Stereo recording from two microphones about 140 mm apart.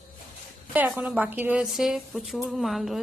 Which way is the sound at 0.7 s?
10° right (ahead or behind).